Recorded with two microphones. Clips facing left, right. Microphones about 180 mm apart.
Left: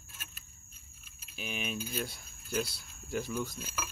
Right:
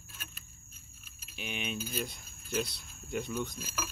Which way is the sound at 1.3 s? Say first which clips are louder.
Even; centre (ahead or behind).